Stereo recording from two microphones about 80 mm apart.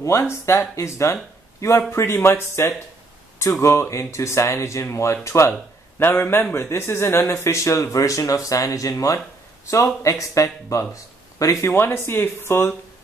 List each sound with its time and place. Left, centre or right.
0.0 s a man's voice: left
11.7 s speech: left